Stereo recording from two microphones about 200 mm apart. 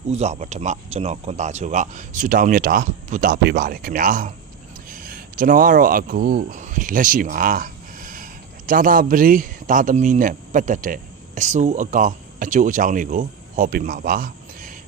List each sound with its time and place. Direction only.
0.1 s speech: 35° right (ahead or behind)